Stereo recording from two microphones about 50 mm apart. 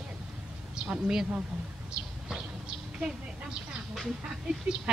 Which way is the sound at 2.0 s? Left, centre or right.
Centre.